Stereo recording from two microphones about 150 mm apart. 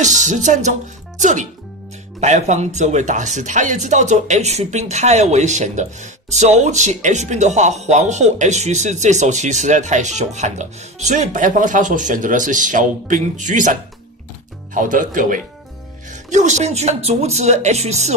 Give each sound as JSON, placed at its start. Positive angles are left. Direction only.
{"t": 0.0, "sound": "speech", "side_deg": -55}
{"t": 16.1, "sound": "speech", "side_deg": -55}